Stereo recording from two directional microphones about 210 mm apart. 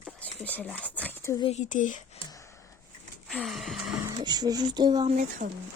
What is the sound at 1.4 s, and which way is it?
Speech, 30° left (ahead or behind).